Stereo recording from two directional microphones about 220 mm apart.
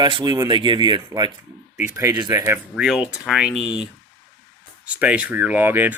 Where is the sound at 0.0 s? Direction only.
20° right (ahead or behind); by 3.7 s 5° right (ahead or behind).